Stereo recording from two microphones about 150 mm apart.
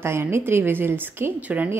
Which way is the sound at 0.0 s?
15° right (ahead or behind).